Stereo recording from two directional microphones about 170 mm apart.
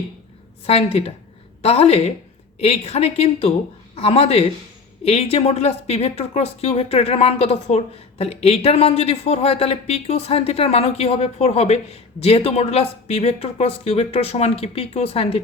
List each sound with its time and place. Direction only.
0.6 s speech: 35° left (ahead or behind)